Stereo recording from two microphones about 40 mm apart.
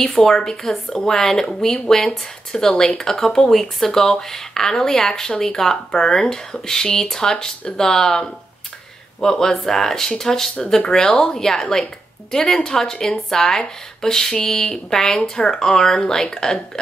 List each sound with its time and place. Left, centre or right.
0.0 s speech: centre